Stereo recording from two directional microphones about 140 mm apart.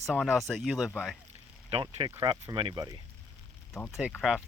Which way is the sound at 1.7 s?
40° right (ahead or behind).